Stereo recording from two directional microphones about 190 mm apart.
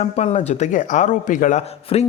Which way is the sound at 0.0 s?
35° left (ahead or behind).